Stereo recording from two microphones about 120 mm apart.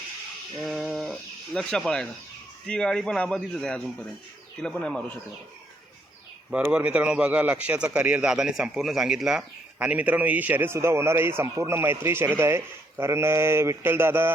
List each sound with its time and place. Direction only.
0.6 s speech: 5° right (ahead or behind)
6.7 s a man's voice: 10° right (ahead or behind)